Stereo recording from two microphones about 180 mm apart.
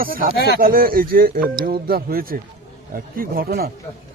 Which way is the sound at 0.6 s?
55° right (ahead or behind).